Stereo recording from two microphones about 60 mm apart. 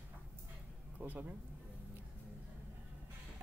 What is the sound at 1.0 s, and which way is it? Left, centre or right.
Speech, right.